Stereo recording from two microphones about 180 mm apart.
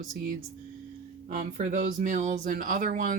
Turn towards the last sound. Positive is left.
turn(degrees=-45)  # may be behind; listen again after turning